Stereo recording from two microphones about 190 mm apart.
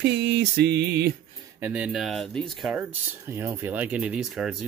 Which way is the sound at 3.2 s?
15° right (ahead or behind).